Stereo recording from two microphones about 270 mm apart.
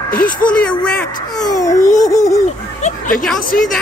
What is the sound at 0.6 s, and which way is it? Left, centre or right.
Speech, centre.